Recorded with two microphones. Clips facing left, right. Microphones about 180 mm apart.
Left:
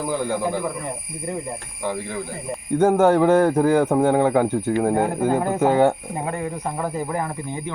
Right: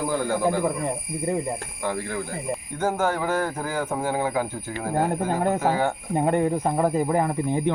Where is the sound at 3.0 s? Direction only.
65° left (ahead or behind).